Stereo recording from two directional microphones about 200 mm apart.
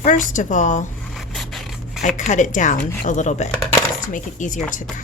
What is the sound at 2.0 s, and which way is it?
Speech, 40° left (ahead or behind).